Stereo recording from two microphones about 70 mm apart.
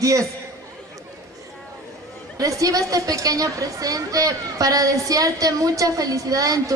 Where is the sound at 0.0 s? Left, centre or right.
Right.